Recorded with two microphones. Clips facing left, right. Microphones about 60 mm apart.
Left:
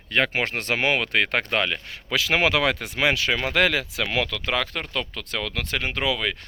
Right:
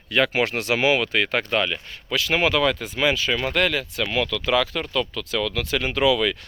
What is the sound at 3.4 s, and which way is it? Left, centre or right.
Speech, left.